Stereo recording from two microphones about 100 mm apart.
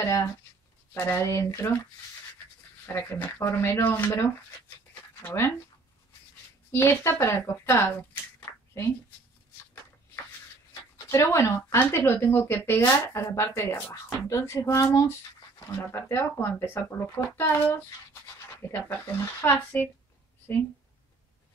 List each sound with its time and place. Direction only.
0.0 s speech: 30° left (ahead or behind)
2.9 s speech: 20° left (ahead or behind)
6.7 s speech: 25° left (ahead or behind)
10.7 s speech: 35° left (ahead or behind)
18.9 s speech: 20° left (ahead or behind)